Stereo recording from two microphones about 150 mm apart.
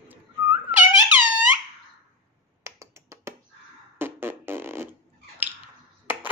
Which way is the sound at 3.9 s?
15° right (ahead or behind).